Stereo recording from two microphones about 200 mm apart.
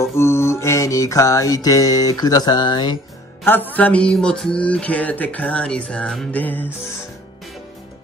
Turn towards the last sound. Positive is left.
turn(degrees=10)  # may be behind; listen again after turning